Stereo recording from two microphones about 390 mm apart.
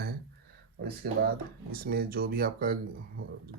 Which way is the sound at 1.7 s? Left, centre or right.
Right.